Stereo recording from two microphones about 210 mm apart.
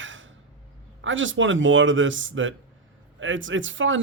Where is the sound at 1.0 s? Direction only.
65° right (ahead or behind).